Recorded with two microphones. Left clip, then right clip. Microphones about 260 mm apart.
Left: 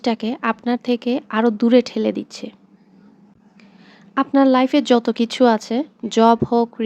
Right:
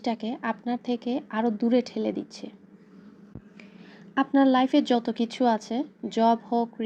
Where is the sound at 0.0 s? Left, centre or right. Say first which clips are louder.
Left 9 dB; left.